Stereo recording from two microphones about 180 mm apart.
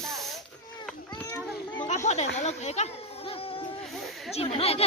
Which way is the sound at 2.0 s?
40° left (ahead or behind).